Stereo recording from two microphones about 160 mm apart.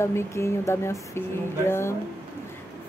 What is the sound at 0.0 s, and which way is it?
Speech, 15° left (ahead or behind).